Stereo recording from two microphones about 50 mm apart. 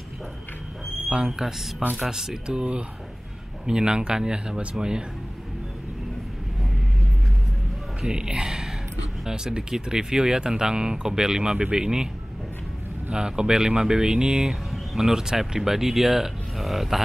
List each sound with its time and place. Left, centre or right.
1.4 s speech: centre
8.0 s speech: centre
13.1 s speech: centre